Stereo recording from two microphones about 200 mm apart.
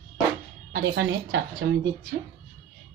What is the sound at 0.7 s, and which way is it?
Speech, 60° right (ahead or behind).